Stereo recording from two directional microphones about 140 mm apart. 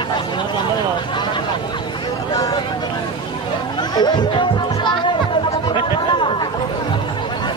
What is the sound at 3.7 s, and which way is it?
Music, 30° left (ahead or behind).